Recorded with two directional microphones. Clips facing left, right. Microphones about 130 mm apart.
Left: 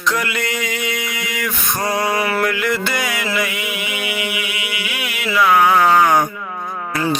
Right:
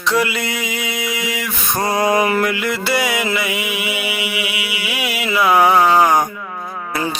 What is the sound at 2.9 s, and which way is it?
Music, 10° right (ahead or behind).